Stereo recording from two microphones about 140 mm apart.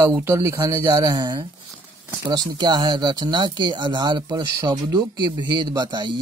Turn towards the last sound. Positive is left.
turn(degrees=-30)  # may be behind; listen again after turning